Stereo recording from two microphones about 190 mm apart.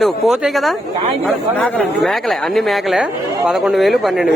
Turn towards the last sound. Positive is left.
turn(degrees=0)  # may be behind; listen again after turning